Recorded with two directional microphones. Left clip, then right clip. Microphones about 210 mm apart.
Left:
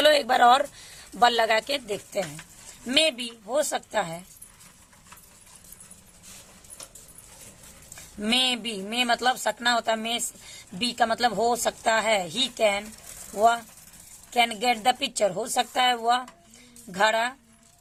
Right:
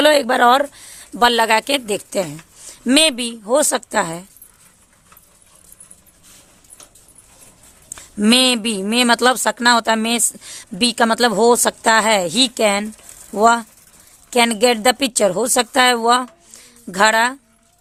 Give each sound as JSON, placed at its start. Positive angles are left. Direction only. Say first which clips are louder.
{"t": 0.0, "sound": "speech", "louder": "right 6 dB", "side_deg": -40}
{"t": 7.9, "sound": "speech", "louder": "right 9 dB", "side_deg": -55}